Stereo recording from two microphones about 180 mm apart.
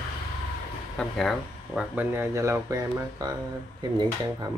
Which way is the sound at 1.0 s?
Centre (ahead or behind).